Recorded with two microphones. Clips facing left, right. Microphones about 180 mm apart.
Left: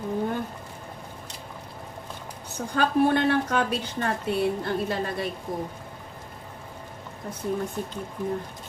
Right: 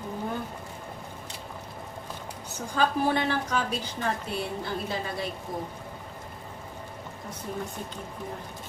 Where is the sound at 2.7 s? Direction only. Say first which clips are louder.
Left 4 dB; 60° left (ahead or behind).